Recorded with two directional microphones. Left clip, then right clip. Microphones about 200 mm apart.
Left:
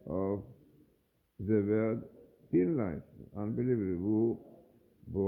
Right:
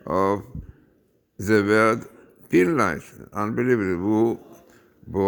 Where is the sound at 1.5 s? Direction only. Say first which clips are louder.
Right 13 dB; 30° right (ahead or behind).